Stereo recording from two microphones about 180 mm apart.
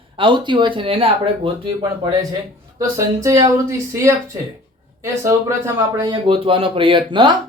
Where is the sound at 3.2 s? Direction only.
20° right (ahead or behind).